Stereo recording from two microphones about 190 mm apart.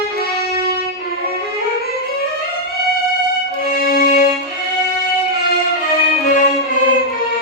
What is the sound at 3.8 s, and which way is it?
Music, 50° left (ahead or behind).